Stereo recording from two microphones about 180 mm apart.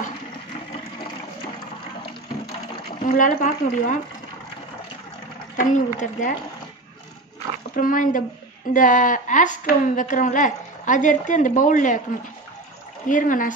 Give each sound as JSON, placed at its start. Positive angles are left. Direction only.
{"t": 3.0, "sound": "speech", "side_deg": 45}
{"t": 5.6, "sound": "speech", "side_deg": 45}
{"t": 7.7, "sound": "speech", "side_deg": 50}
{"t": 13.1, "sound": "speech", "side_deg": 50}